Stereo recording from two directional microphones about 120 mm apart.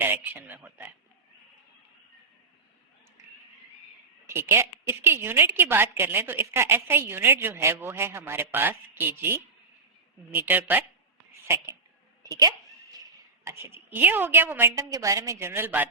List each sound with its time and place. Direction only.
0.0 s speech: 15° right (ahead or behind)
4.3 s a woman's voice: 20° right (ahead or behind)
12.2 s a sound: 30° right (ahead or behind)
13.4 s a woman's voice: 20° right (ahead or behind)